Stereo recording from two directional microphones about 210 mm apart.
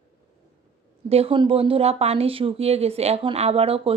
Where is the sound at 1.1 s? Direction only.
25° right (ahead or behind).